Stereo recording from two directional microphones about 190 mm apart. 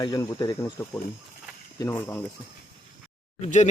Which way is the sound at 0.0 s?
20° left (ahead or behind).